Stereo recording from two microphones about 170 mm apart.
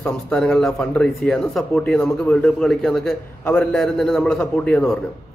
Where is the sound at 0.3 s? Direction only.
5° left (ahead or behind).